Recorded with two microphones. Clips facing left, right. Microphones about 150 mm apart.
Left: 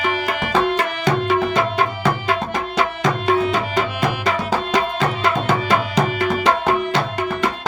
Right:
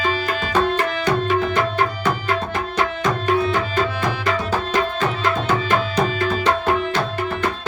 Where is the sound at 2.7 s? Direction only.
90° left.